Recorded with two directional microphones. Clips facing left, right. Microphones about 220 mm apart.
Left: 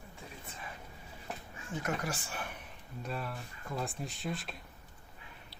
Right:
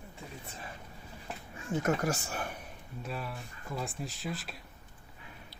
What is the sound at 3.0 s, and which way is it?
Speech, centre (ahead or behind).